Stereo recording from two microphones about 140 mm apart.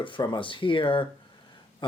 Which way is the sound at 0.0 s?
35° left (ahead or behind).